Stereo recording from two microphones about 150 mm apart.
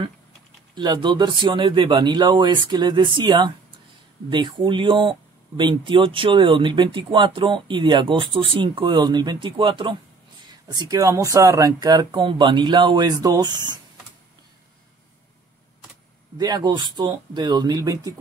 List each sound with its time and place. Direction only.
0.7 s speech: 30° right (ahead or behind)
16.3 s speech: 25° right (ahead or behind)